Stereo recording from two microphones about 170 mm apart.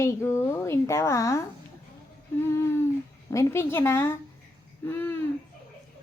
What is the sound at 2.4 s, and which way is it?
A woman's voice, 15° left (ahead or behind).